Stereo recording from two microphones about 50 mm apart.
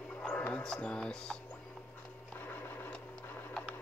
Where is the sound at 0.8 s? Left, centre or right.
Centre.